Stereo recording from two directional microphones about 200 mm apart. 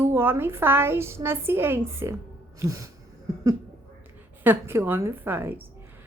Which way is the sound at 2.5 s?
15° right (ahead or behind).